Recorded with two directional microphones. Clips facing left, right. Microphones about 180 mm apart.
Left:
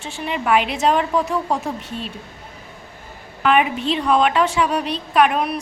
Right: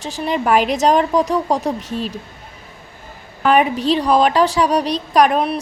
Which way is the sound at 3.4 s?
40° right (ahead or behind).